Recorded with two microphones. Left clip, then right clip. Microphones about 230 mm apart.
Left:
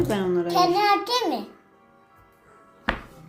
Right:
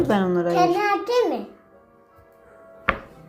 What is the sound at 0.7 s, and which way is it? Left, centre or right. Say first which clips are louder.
Child singing: even; left.